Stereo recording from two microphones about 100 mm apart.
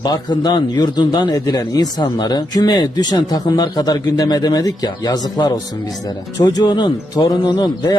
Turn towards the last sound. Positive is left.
turn(degrees=45)  # may be behind; listen again after turning